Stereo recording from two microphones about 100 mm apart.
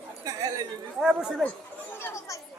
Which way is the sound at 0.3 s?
40° right (ahead or behind).